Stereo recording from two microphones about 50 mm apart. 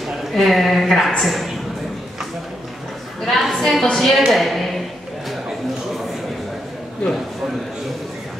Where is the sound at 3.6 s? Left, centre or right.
Centre.